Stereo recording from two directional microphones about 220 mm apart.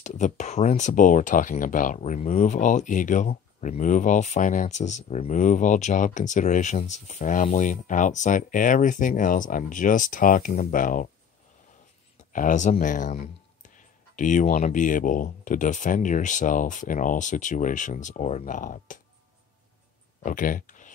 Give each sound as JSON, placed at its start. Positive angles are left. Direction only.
{"t": 0.0, "sound": "speech", "side_deg": 35}
{"t": 12.3, "sound": "speech", "side_deg": 35}
{"t": 20.2, "sound": "speech", "side_deg": 35}